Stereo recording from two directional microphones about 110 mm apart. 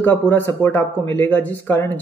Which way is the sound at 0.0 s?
15° left (ahead or behind).